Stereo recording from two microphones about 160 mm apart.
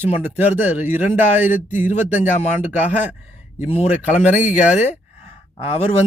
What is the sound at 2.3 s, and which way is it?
Speech, 45° left (ahead or behind).